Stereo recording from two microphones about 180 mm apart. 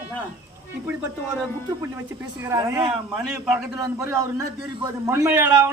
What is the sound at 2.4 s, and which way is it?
Speech, 15° right (ahead or behind).